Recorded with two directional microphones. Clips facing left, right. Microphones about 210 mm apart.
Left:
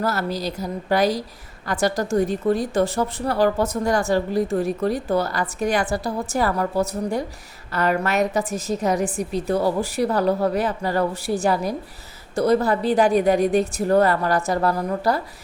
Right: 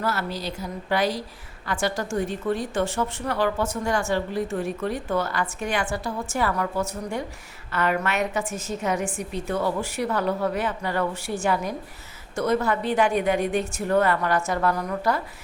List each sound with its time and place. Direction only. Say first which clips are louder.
0.0 s a woman's voice: left 4 dB; 40° left (ahead or behind)